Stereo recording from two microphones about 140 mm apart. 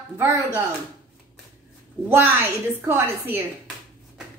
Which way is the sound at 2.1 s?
15° right (ahead or behind).